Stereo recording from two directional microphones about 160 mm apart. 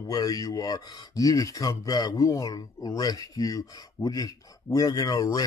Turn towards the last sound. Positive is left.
turn(degrees=25)  # may be behind; listen again after turning